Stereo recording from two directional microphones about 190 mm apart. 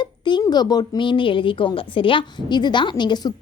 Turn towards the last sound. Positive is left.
turn(degrees=25)  # may be behind; listen again after turning